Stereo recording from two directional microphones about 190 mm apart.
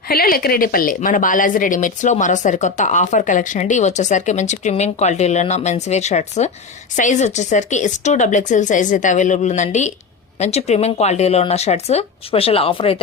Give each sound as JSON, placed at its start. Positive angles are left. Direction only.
{"t": 0.1, "sound": "speech", "side_deg": 55}